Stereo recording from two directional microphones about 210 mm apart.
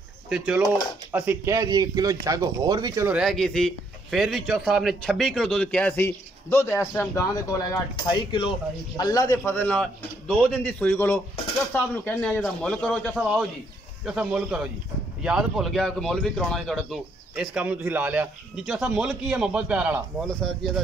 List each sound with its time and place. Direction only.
1.1 s a man's voice: 10° right (ahead or behind)